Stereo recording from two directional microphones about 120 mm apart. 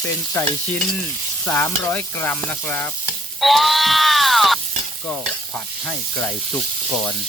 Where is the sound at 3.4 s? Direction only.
Centre (ahead or behind).